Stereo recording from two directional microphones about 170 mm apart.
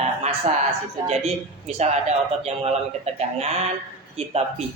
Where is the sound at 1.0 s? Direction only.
40° right (ahead or behind).